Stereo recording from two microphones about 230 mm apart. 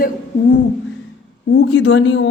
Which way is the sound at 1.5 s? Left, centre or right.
Left.